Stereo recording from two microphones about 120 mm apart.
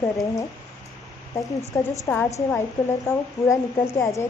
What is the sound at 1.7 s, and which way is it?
A woman's voice, 20° left (ahead or behind).